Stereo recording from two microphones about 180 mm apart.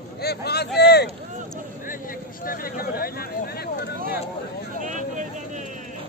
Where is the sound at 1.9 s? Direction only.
50° left (ahead or behind).